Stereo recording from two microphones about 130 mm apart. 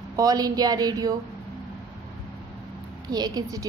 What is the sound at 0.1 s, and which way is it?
Speech, 30° right (ahead or behind).